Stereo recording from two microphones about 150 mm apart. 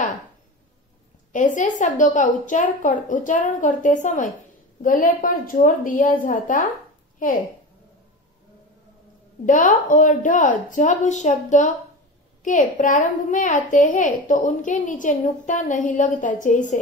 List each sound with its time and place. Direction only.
1.3 s a woman's voice: 60° left (ahead or behind)
9.5 s a woman's voice: 60° left (ahead or behind)